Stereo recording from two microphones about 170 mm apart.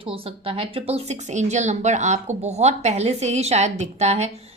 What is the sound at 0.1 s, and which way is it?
A woman's voice, 30° right (ahead or behind).